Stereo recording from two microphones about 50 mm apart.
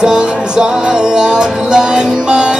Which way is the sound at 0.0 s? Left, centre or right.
Centre.